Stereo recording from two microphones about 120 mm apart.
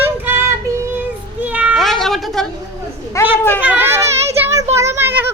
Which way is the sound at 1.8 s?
Centre (ahead or behind).